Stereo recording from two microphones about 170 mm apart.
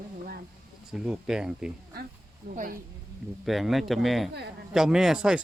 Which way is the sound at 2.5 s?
55° right (ahead or behind).